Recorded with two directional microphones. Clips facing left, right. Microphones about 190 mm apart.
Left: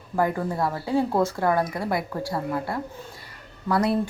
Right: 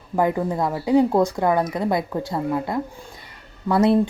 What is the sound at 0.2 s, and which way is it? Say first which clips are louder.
Speech: right 3 dB; 20° right (ahead or behind).